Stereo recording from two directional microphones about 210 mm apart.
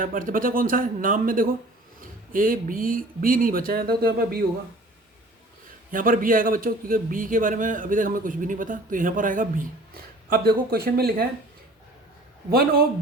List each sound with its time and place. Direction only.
0.0 s a man's voice: 40° right (ahead or behind)
5.9 s a man's voice: 40° right (ahead or behind)
12.5 s speech: 45° right (ahead or behind)